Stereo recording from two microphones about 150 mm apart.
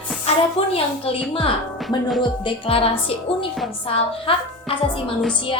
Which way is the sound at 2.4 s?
35° left (ahead or behind).